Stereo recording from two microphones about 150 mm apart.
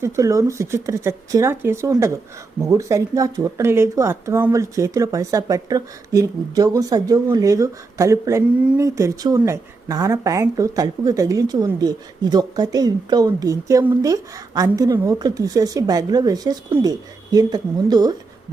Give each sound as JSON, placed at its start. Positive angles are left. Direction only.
{"t": 0.0, "sound": "speech", "side_deg": -20}